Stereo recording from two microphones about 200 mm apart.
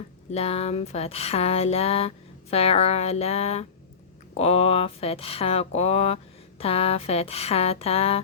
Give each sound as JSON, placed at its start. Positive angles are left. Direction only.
{"t": 0.3, "sound": "speech", "side_deg": 30}